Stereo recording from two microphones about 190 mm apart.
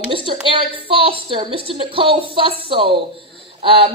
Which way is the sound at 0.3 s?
30° right (ahead or behind).